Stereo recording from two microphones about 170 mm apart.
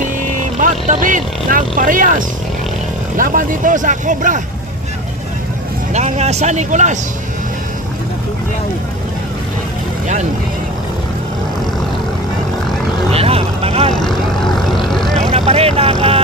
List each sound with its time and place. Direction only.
0.6 s speech: 50° right (ahead or behind)
5.9 s speech: 40° right (ahead or behind)
13.1 s vehicle: 35° right (ahead or behind)
13.9 s vehicle: 5° left (ahead or behind)
15.2 s vehicle: 35° right (ahead or behind)